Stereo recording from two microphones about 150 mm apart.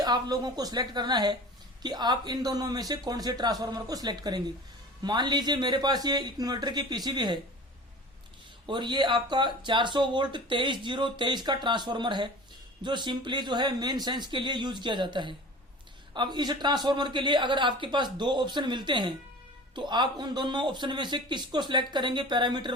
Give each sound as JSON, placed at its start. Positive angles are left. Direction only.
{"t": 0.0, "sound": "speech", "side_deg": -25}
{"t": 8.6, "sound": "speech", "side_deg": -30}